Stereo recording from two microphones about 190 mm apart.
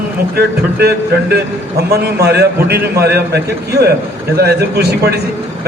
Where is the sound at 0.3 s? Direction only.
55° right (ahead or behind).